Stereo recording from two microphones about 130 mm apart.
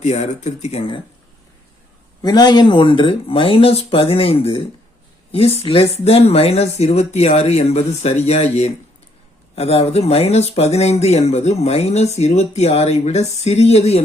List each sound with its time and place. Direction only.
0.0 s speech: 60° left (ahead or behind)
2.2 s speech: 30° left (ahead or behind); by 8.4 s 55° left (ahead or behind)
9.6 s speech: 50° left (ahead or behind)